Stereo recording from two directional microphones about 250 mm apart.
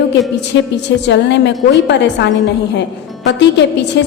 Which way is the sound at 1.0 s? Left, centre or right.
Left.